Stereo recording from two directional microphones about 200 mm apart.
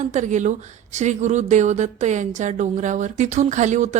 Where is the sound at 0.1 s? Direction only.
35° right (ahead or behind).